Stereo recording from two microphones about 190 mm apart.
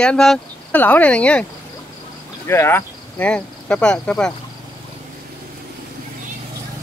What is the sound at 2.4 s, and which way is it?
Speech, 15° left (ahead or behind).